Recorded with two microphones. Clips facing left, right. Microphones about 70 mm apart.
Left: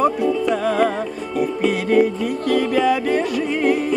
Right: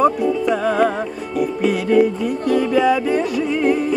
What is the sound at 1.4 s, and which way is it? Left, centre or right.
Music, left.